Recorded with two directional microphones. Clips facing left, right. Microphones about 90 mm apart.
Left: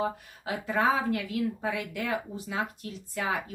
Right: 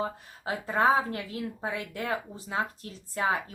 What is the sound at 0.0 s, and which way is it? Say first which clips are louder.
Speech: left 2 dB; 30° right (ahead or behind).